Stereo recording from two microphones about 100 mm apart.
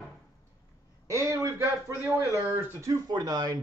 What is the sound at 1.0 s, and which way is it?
Speech, 30° right (ahead or behind).